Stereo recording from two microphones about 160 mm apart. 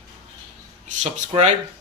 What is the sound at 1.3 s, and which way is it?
Speech, 40° right (ahead or behind).